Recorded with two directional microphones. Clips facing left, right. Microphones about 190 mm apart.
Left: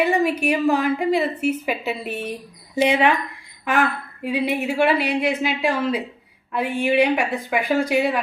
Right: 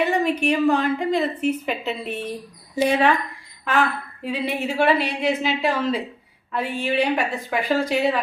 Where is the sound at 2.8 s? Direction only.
20° left (ahead or behind).